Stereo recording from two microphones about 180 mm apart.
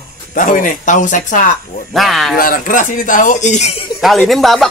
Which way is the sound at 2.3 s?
50° left (ahead or behind).